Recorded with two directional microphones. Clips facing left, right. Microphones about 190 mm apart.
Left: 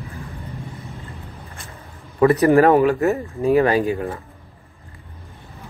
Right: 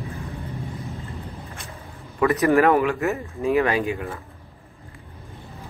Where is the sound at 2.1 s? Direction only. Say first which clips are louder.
Left 4 dB; 35° left (ahead or behind).